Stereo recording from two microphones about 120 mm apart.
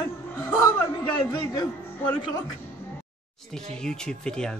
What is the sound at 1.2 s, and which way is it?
Speech, 35° left (ahead or behind).